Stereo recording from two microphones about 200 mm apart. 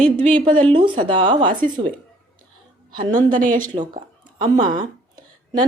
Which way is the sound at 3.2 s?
40° right (ahead or behind).